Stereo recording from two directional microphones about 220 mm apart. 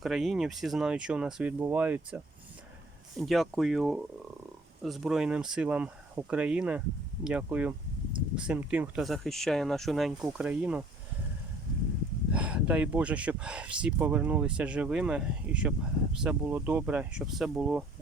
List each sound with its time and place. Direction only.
0.0 s speech: centre (ahead or behind)
12.3 s speech: 5° right (ahead or behind)